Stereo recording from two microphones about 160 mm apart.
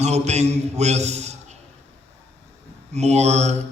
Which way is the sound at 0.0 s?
45° right (ahead or behind).